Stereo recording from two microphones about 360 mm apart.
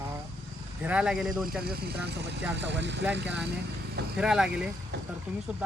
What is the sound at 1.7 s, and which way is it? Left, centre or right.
Speech, right.